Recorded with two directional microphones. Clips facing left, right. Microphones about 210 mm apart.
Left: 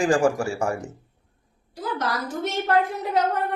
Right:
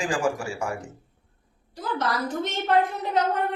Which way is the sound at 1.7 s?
10° left (ahead or behind).